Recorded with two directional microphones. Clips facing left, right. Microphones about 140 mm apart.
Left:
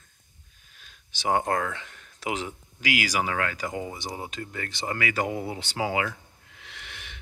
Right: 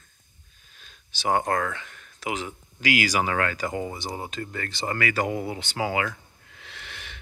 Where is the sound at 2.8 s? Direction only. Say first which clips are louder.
Right 3 dB; 10° left (ahead or behind).